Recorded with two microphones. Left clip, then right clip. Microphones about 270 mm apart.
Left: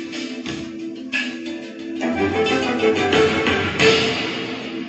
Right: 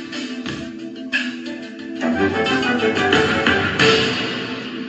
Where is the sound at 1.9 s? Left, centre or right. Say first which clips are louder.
Right 1 dB; right.